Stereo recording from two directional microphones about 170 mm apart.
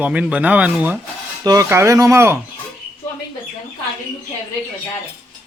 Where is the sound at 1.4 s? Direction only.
20° right (ahead or behind).